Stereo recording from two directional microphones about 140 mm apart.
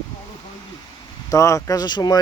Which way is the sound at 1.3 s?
20° left (ahead or behind).